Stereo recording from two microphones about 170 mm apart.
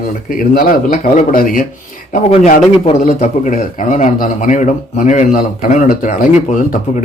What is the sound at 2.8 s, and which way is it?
Speech, 45° left (ahead or behind).